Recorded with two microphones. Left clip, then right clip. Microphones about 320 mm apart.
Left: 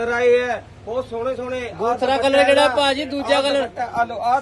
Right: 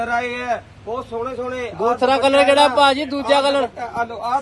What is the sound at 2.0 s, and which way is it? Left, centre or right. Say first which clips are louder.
A man's voice: right 2 dB; right.